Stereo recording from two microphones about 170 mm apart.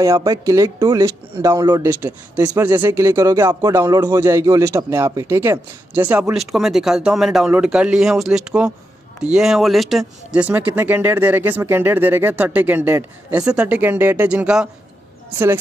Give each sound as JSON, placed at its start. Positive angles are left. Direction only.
{"t": 0.0, "sound": "speech", "side_deg": -20}